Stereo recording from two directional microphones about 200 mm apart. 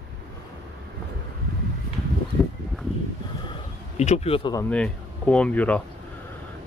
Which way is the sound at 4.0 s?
35° left (ahead or behind).